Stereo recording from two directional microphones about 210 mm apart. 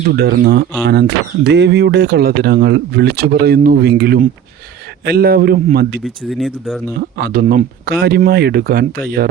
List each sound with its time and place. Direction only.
0.1 s speech: 50° right (ahead or behind)
6.2 s speech: centre (ahead or behind)
7.2 s speech: 45° right (ahead or behind)